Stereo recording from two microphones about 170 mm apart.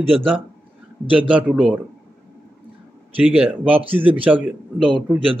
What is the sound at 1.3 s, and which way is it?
Speech, 10° right (ahead or behind).